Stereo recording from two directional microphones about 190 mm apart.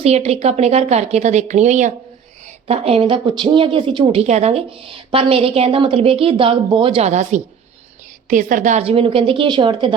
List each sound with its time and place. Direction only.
0.0 s a woman's voice: 35° right (ahead or behind)